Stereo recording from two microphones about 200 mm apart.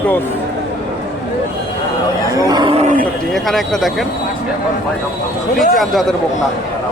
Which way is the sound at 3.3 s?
Centre (ahead or behind).